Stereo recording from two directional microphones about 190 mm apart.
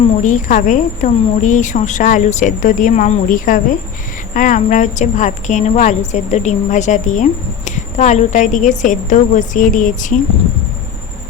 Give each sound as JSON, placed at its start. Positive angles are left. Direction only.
{"t": 0.2, "sound": "a woman's voice", "side_deg": 40}